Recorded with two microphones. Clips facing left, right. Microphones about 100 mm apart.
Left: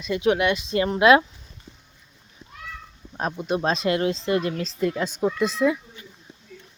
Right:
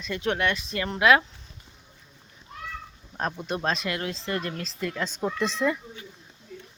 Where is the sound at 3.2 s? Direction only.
10° left (ahead or behind).